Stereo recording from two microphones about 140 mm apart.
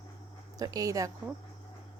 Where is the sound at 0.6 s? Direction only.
25° right (ahead or behind).